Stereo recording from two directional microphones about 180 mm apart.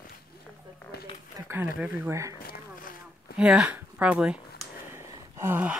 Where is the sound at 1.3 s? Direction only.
15° right (ahead or behind).